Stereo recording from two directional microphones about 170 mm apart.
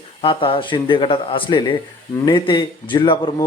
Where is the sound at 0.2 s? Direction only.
30° left (ahead or behind).